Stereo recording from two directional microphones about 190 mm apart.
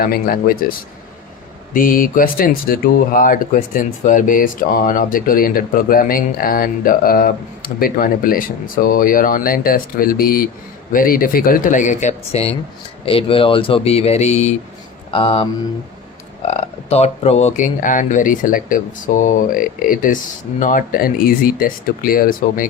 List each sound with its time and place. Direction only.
0.0 s speech: 50° left (ahead or behind)
1.7 s speech: 45° left (ahead or behind); by 15.4 s 30° left (ahead or behind)
16.5 s speech: 35° left (ahead or behind); by 22.6 s 50° left (ahead or behind)